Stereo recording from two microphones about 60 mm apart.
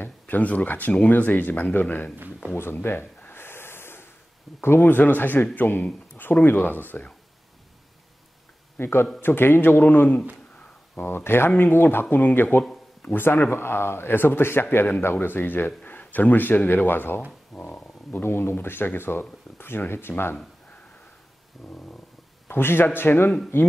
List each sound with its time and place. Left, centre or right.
0.0 s a man's voice: left
3.2 s snort: left
4.6 s a man's voice: left
8.7 s a man's voice: left
17.5 s stomach rumble: centre
18.2 s speech: left
21.6 s a man's voice: left
22.5 s a man's voice: left